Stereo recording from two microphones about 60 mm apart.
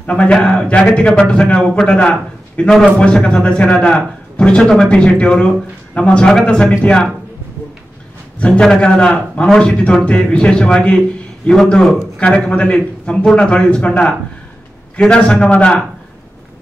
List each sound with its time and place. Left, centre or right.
0.0 s a man's voice: centre
8.4 s speech: centre